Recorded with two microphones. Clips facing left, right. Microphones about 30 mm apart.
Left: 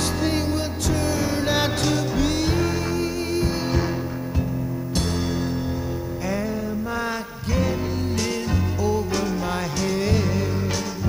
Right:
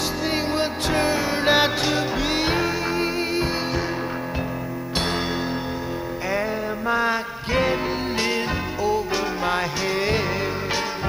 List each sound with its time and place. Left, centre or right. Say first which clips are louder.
0.3 s music: right 1 dB; right
6.9 s music: right 9 dB; right
8.8 s music: right 1 dB; right